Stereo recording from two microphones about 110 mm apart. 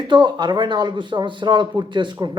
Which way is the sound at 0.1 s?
45° right (ahead or behind).